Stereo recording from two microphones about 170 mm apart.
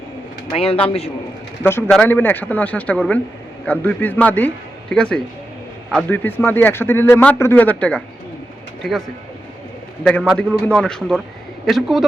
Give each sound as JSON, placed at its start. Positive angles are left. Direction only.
{"t": 0.5, "sound": "speech", "side_deg": 35}
{"t": 1.6, "sound": "a man's voice", "side_deg": 10}